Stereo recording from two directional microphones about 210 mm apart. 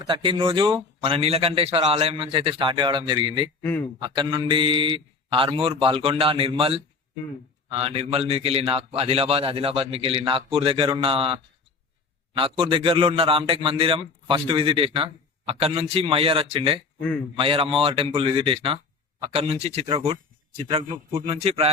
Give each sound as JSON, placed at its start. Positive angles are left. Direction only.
{"t": 0.0, "sound": "a man's voice", "side_deg": -25}
{"t": 3.6, "sound": "a man's voice", "side_deg": 10}
{"t": 4.0, "sound": "a man's voice", "side_deg": -20}